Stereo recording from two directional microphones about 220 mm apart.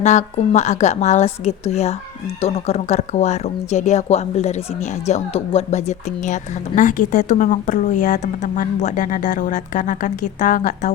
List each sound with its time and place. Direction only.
0.0 s a woman's voice: 30° left (ahead or behind)